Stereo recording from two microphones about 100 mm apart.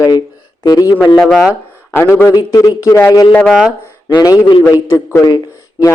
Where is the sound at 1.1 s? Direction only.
Centre (ahead or behind).